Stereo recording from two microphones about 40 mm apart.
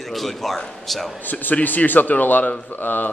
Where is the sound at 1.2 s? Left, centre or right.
Left.